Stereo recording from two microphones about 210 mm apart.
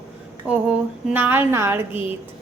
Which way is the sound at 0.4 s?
5° right (ahead or behind).